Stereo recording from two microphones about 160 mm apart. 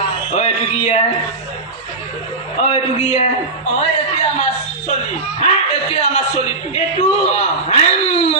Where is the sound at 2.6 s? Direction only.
40° left (ahead or behind).